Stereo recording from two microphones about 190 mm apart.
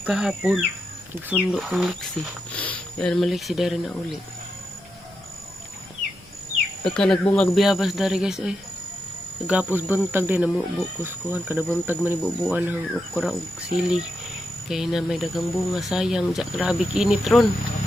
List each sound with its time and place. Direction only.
0.0 s speech: 5° right (ahead or behind)
6.8 s speech: 5° left (ahead or behind)
9.5 s cricket: 10° right (ahead or behind)
13.1 s speech: 5° right (ahead or behind)